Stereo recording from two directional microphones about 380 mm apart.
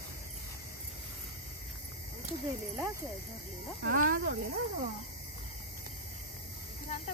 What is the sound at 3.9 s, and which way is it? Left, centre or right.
Speech, right.